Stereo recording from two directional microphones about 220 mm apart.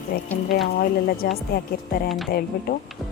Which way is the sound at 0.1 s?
45° left (ahead or behind).